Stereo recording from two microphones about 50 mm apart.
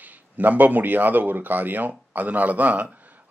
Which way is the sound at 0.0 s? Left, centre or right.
Right.